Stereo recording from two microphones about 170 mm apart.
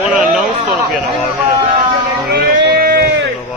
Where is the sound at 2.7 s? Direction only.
65° right (ahead or behind).